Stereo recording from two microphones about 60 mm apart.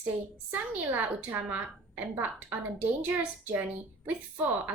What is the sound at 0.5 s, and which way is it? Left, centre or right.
A woman's voice, right.